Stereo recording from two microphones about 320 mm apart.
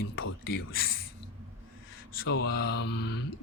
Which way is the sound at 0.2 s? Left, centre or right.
Left.